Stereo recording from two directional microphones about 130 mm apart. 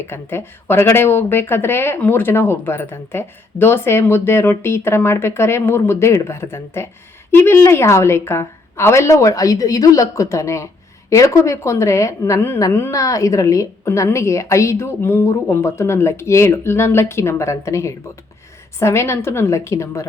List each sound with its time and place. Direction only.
0.1 s speech: 15° left (ahead or behind)